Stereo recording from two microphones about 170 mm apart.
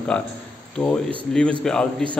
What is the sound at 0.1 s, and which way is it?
A man's voice, 5° left (ahead or behind).